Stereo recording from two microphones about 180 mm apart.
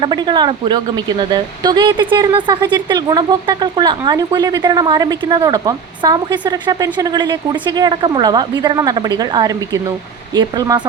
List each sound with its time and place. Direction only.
0.0 s speech: 25° right (ahead or behind)